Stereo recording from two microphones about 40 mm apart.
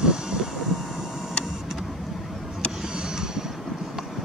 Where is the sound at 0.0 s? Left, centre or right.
Centre.